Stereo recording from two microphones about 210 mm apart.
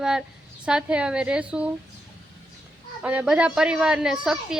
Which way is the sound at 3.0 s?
5° right (ahead or behind).